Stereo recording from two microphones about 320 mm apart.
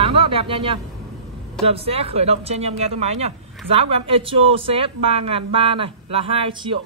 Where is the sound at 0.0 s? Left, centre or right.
Centre.